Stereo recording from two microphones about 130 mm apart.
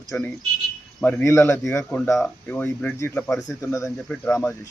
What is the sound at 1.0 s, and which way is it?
Speech, 15° left (ahead or behind).